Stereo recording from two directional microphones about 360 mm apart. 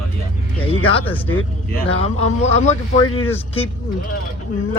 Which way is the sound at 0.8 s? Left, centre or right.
Centre.